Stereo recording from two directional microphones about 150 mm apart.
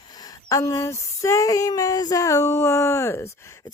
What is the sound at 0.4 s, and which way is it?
Female singing, 20° left (ahead or behind).